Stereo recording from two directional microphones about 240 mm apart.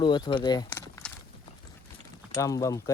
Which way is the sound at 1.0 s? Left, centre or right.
Centre.